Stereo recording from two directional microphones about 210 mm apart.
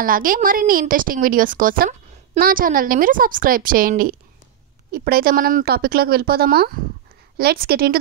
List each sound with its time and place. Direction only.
0.0 s a woman's voice: 40° right (ahead or behind)